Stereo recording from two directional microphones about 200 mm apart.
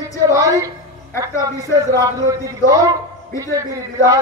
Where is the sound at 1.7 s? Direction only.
15° right (ahead or behind).